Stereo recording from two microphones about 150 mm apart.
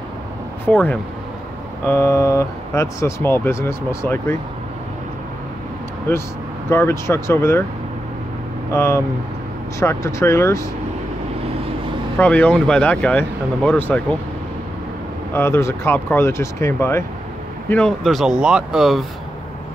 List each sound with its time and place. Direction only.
0.7 s speech: 10° left (ahead or behind)
6.7 s speech: 15° left (ahead or behind)
8.7 s speech: 15° left (ahead or behind)
12.2 s speech: 10° left (ahead or behind)
15.3 s speech: 15° left (ahead or behind)
17.6 s speech: 5° left (ahead or behind)